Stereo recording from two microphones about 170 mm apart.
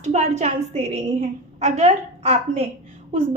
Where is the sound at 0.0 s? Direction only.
40° right (ahead or behind).